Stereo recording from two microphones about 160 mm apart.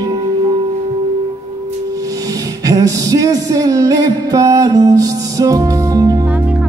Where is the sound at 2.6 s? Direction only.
20° right (ahead or behind).